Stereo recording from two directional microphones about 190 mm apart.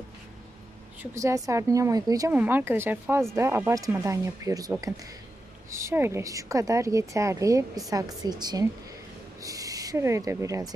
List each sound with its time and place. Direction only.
1.1 s a woman's voice: 15° right (ahead or behind)